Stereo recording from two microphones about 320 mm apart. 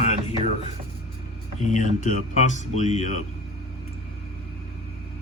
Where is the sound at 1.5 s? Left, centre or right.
Left.